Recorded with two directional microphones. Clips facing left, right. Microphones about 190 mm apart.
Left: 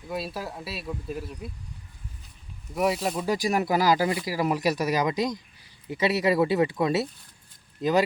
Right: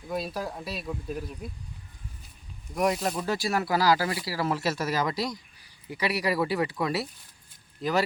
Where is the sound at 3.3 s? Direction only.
15° left (ahead or behind).